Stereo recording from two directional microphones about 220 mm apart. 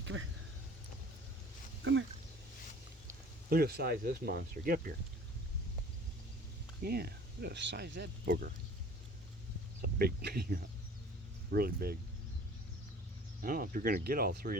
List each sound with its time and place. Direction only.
0.0 s speech: 60° right (ahead or behind)
1.8 s speech: 55° right (ahead or behind)
3.5 s speech: 45° right (ahead or behind)
6.8 s speech: 45° right (ahead or behind)
9.8 s speech: 45° right (ahead or behind)
13.4 s speech: 40° right (ahead or behind)